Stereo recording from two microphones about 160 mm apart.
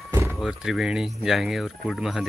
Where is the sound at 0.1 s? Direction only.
15° right (ahead or behind).